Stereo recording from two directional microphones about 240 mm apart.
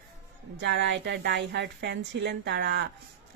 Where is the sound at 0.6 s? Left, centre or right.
Right.